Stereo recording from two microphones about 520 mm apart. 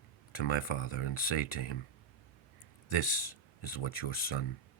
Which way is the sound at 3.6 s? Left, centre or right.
Left.